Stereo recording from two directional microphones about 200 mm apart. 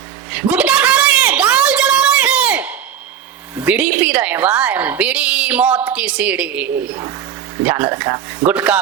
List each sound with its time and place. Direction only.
0.5 s a sound: 5° right (ahead or behind)
3.6 s a woman's voice: 5° right (ahead or behind)
7.9 s speech: 20° right (ahead or behind)
8.4 s a woman's voice: 10° right (ahead or behind)